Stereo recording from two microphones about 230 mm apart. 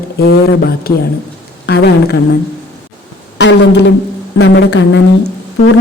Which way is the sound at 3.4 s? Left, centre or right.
Left.